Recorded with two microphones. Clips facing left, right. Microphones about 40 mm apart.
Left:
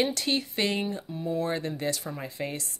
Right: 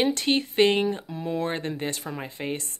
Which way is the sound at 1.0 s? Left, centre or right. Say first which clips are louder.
Right 1 dB; right.